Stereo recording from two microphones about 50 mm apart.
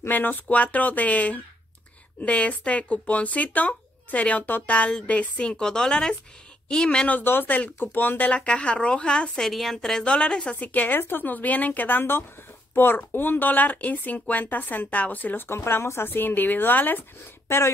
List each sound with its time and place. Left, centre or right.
0.1 s a woman's voice: left; by 7.1 s centre
7.1 s speech: left
8.4 s a woman's voice: left
10.5 s speech: left